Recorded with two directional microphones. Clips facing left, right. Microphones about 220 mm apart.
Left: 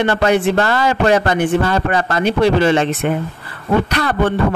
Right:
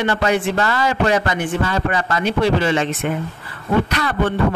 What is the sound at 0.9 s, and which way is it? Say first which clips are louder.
Speech: left 4 dB; 55° left (ahead or behind).